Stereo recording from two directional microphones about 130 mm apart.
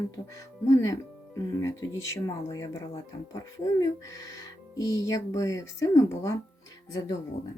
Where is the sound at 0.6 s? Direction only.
25° left (ahead or behind).